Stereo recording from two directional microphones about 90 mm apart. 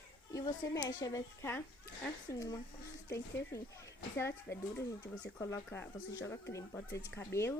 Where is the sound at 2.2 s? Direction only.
40° left (ahead or behind).